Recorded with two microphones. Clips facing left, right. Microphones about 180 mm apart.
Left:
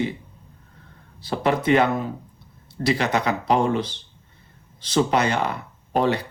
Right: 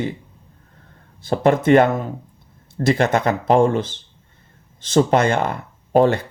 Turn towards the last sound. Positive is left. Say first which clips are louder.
# right 6 dB
turn(degrees=-50)  # may be behind; listen again after turning